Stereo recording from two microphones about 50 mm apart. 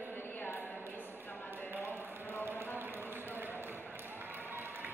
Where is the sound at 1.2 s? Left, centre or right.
Left.